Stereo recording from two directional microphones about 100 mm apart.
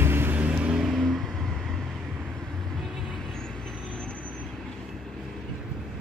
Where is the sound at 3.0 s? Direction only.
5° left (ahead or behind).